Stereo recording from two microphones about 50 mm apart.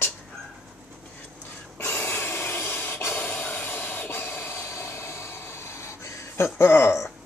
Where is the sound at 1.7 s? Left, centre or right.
Left.